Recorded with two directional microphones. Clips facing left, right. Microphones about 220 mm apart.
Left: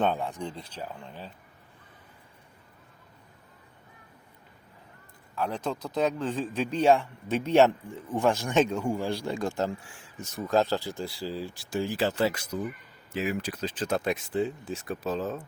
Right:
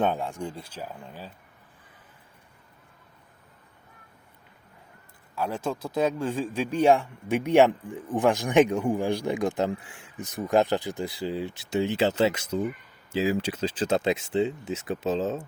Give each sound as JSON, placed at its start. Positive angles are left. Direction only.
{"t": 0.0, "sound": "a man's voice", "side_deg": -10}
{"t": 5.3, "sound": "a man's voice", "side_deg": -5}